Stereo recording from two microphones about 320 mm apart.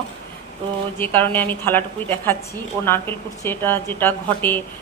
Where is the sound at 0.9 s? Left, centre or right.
Centre.